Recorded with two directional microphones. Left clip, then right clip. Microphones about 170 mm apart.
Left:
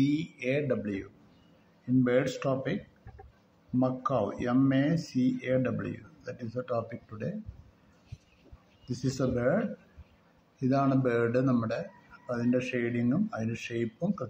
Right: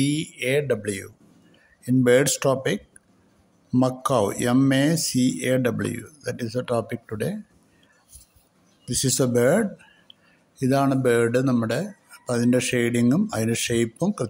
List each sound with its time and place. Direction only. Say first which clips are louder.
0.0 s speech: right 5 dB; 65° right (ahead or behind); by 1.0 s 85° right
2.0 s speech: right 11 dB; 90° right
3.8 s speech: right 7 dB; 90° right
8.8 s speech: right 8 dB; 85° right
10.6 s speech: right 6 dB; 70° right (ahead or behind)
12.3 s speech: right 8 dB; 90° right